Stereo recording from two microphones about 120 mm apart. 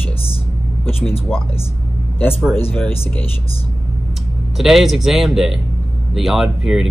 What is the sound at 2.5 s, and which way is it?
Speech, 15° left (ahead or behind).